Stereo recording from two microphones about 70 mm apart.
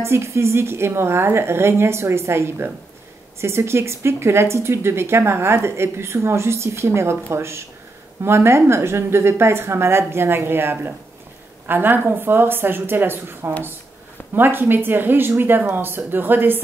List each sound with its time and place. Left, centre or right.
0.0 s a woman's voice: right